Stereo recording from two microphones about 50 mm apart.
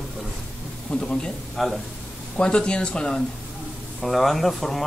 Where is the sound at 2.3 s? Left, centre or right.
Centre.